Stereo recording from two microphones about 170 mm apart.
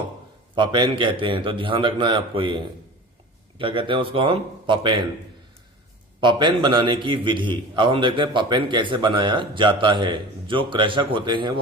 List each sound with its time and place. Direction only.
0.5 s a man's voice: 30° right (ahead or behind)
6.1 s a man's voice: 25° right (ahead or behind)